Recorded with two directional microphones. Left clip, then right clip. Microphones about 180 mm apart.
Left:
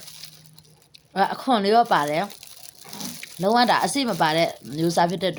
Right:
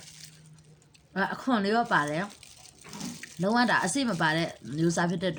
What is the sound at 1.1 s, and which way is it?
Speech, 20° right (ahead or behind).